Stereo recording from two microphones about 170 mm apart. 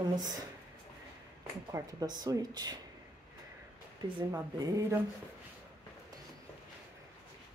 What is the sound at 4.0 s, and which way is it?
Speech, 20° right (ahead or behind).